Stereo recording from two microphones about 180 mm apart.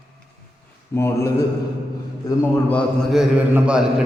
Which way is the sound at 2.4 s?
5° left (ahead or behind).